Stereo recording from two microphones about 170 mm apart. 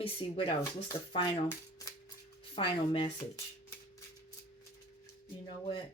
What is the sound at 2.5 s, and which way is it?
Speech, 30° left (ahead or behind).